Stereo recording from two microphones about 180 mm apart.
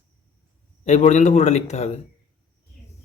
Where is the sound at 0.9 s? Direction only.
40° left (ahead or behind).